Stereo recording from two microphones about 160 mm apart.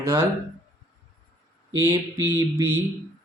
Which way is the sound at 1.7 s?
20° right (ahead or behind).